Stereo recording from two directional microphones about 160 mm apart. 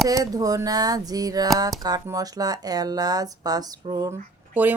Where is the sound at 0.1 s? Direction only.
20° right (ahead or behind).